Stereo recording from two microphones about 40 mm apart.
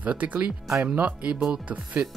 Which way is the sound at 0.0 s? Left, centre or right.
Right.